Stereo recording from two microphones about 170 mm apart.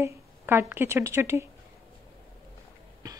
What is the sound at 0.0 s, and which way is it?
Speech, 15° right (ahead or behind).